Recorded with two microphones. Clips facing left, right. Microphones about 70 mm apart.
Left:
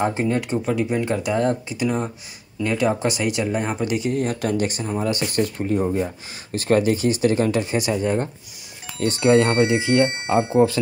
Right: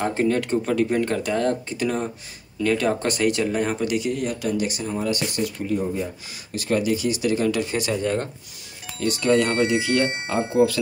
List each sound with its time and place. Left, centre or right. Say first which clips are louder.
0.0 s speech: even; centre; by 4.8 s left
4.8 s speech: left 1 dB; left
5.3 s speech: left 3 dB; left
9.0 s speech: left 3 dB; left